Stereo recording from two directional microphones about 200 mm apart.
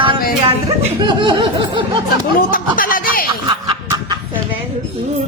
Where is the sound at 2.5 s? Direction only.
45° left (ahead or behind).